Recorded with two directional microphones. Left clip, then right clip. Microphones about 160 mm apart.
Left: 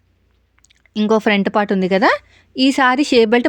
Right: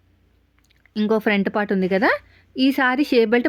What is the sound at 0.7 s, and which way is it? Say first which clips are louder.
Speech: left 5 dB; 35° left (ahead or behind).